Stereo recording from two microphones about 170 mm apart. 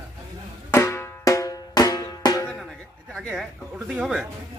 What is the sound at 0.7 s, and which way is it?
Drum, 15° left (ahead or behind).